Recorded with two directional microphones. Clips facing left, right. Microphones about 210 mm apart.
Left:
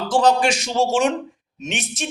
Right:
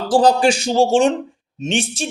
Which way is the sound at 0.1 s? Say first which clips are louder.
Right 4 dB; 35° right (ahead or behind).